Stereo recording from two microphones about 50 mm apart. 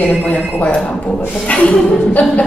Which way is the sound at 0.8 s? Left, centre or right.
Centre.